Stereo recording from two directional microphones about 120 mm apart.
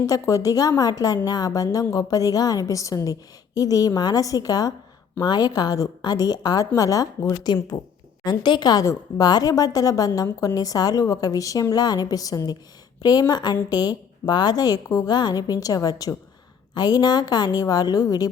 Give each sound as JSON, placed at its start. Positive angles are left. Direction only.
{"t": 0.0, "sound": "a woman's voice", "side_deg": 30}